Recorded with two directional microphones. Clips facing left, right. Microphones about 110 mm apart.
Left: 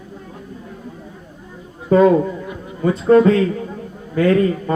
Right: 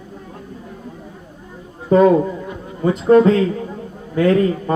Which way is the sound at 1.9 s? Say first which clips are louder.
Even; 25° right (ahead or behind).